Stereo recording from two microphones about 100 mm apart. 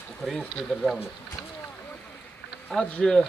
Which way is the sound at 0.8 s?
Centre (ahead or behind).